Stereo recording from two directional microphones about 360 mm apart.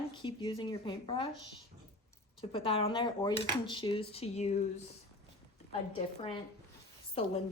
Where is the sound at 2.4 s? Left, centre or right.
Centre.